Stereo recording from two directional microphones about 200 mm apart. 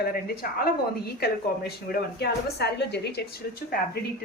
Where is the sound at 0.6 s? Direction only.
50° left (ahead or behind).